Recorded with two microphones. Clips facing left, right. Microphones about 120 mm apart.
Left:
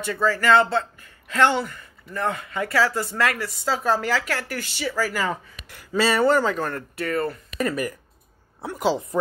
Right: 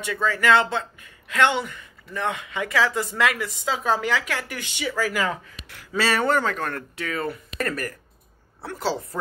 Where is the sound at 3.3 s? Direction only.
Centre (ahead or behind).